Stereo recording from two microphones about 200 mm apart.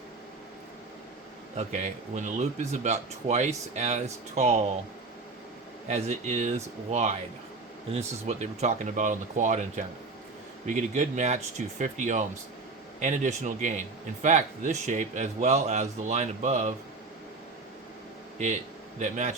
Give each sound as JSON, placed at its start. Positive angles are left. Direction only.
{"t": 2.1, "sound": "a man's voice", "side_deg": -35}
{"t": 5.9, "sound": "a man's voice", "side_deg": -35}
{"t": 18.4, "sound": "a man's voice", "side_deg": -35}